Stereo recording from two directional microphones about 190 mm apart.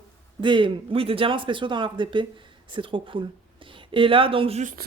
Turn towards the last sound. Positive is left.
turn(degrees=-35)  # may be behind; listen again after turning